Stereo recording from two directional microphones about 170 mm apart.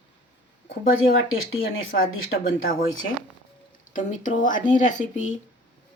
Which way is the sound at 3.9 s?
50° left (ahead or behind).